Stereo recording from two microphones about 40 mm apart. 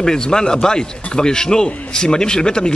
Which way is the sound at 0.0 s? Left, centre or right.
Centre.